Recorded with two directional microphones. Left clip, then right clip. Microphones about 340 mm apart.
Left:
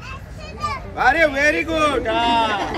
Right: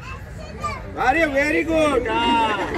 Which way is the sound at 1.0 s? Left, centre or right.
Centre.